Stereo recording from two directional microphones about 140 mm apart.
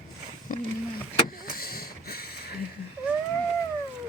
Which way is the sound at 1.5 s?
90° left.